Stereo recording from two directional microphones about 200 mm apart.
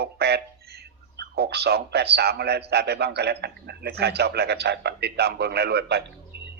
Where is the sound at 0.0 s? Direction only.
55° right (ahead or behind).